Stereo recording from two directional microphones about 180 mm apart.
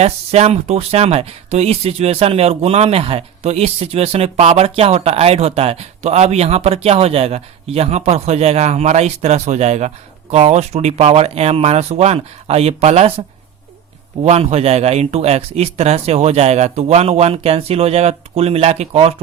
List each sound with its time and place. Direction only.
0.0 s speech: 35° right (ahead or behind)